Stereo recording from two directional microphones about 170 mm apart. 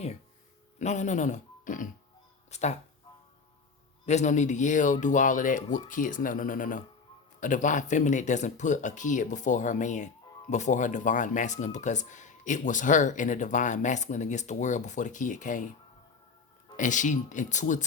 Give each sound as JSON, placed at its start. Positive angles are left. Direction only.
{"t": 0.8, "sound": "speech", "side_deg": 45}
{"t": 4.0, "sound": "speech", "side_deg": 40}
{"t": 16.7, "sound": "speech", "side_deg": 50}